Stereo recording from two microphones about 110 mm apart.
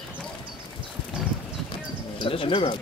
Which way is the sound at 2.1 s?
55° left (ahead or behind).